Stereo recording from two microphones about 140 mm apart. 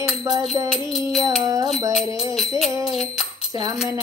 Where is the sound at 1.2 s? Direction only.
25° right (ahead or behind).